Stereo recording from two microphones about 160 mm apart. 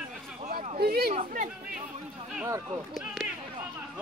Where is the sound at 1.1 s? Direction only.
50° right (ahead or behind).